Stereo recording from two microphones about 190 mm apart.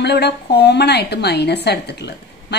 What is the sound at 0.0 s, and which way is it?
A woman's voice, 60° left (ahead or behind).